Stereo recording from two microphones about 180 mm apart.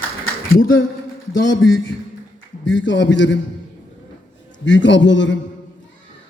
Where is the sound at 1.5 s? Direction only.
90° left.